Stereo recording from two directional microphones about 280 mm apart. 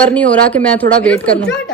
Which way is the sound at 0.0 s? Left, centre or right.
Centre.